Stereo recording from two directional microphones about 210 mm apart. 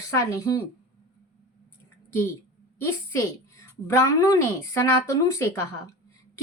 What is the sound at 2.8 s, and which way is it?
A woman's voice, 15° left (ahead or behind).